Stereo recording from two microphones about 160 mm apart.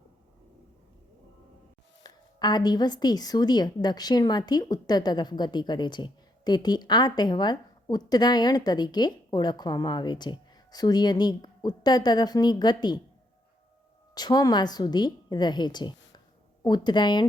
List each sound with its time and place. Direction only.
2.0 s a woman's voice: 25° left (ahead or behind)
14.2 s a woman's voice: 25° left (ahead or behind)